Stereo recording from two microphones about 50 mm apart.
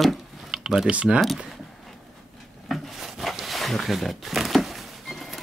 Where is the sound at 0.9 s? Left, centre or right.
Right.